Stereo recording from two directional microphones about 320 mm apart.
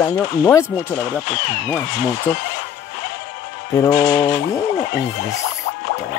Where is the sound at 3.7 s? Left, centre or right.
Centre.